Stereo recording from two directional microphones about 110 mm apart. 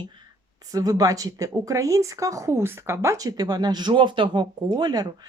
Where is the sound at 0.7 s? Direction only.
35° right (ahead or behind).